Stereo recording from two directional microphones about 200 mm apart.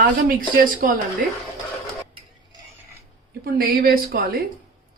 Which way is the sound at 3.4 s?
50° right (ahead or behind).